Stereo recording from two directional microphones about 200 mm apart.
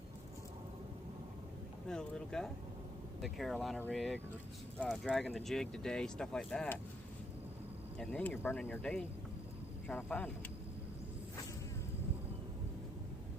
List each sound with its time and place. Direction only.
1.9 s speech: 5° left (ahead or behind)
7.9 s speech: 10° left (ahead or behind)